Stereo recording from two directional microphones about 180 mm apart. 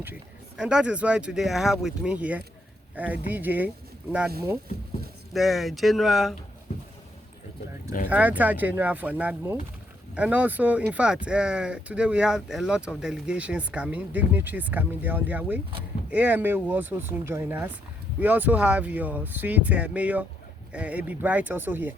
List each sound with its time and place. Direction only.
0.0 s speech: 10° right (ahead or behind)
5.3 s speech: centre (ahead or behind)
8.1 s speech: 10° right (ahead or behind)